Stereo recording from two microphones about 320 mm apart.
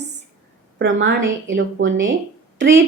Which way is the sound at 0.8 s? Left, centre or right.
Right.